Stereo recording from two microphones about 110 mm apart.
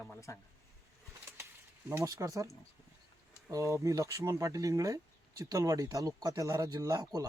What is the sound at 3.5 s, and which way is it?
A man's voice, 30° right (ahead or behind).